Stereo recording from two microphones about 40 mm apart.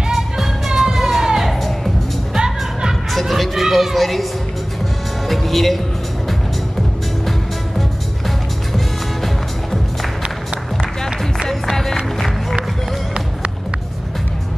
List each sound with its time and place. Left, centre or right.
0.1 s music: centre
3.1 s a woman's voice: centre
5.3 s speech: centre
8.7 s music: centre
10.8 s music: centre
11.7 s music: centre